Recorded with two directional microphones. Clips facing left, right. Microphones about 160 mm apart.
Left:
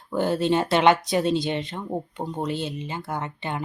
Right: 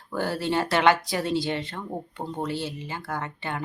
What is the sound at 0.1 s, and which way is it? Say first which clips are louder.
Speech: left 4 dB; 20° left (ahead or behind).